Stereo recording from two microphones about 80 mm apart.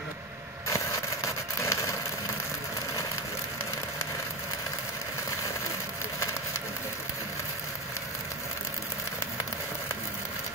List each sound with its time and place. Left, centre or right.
0.7 s vehicle: left